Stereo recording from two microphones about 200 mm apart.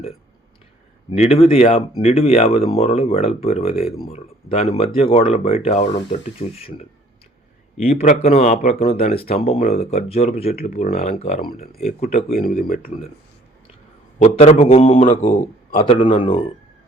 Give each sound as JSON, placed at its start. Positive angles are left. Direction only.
{"t": 1.1, "sound": "speech", "side_deg": 30}
{"t": 7.9, "sound": "speech", "side_deg": 30}
{"t": 10.5, "sound": "speech", "side_deg": 50}
{"t": 10.8, "sound": "speech", "side_deg": 35}
{"t": 12.3, "sound": "speech", "side_deg": 45}
{"t": 14.2, "sound": "speech", "side_deg": 30}
{"t": 15.8, "sound": "speech", "side_deg": 25}